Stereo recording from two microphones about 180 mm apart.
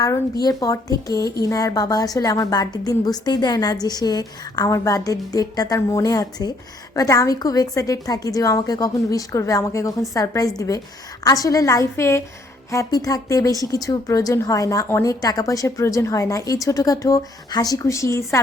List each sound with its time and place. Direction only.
0.4 s a woman's voice: 20° left (ahead or behind)